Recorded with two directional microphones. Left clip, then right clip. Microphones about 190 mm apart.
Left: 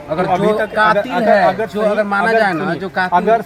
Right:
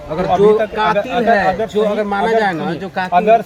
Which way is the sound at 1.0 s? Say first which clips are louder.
Even; 20° left (ahead or behind).